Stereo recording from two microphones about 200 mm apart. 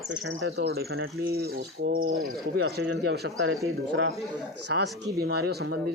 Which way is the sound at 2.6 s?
55° right (ahead or behind).